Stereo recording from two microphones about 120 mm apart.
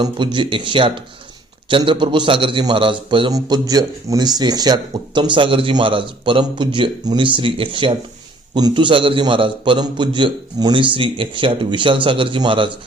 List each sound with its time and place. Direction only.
0.0 s a man's voice: 40° right (ahead or behind)
3.3 s a man's voice: 30° right (ahead or behind)